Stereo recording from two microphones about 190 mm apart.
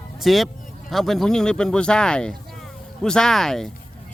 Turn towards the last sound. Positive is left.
turn(degrees=0)  # may be behind; listen again after turning